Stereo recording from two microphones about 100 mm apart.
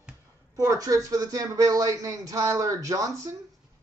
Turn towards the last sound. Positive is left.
turn(degrees=-35)  # may be behind; listen again after turning